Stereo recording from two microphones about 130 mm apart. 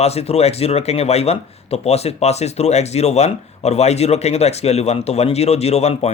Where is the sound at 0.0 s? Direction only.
55° left (ahead or behind).